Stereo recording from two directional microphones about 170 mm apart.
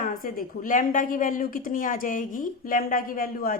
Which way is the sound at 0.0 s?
55° left (ahead or behind).